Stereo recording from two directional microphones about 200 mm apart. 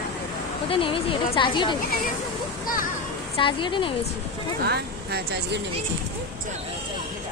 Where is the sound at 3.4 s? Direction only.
25° left (ahead or behind).